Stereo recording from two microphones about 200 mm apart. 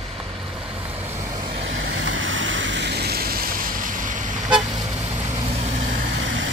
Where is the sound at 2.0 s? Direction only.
70° right (ahead or behind); by 4.2 s 40° right (ahead or behind).